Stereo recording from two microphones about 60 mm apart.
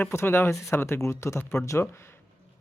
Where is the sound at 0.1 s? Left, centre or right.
Left.